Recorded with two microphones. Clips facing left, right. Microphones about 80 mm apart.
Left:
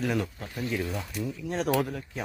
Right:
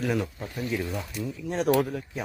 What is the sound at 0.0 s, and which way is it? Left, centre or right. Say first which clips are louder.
Speech: right 1 dB; centre.